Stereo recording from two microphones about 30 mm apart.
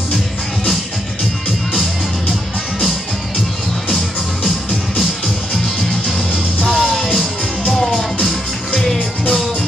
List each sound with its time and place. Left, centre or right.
6.6 s music: left
7.7 s music: centre